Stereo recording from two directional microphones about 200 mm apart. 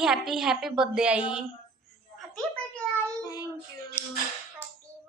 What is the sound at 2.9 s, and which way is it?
Cat, 15° left (ahead or behind).